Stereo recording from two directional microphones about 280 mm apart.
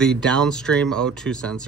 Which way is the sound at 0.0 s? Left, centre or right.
Centre.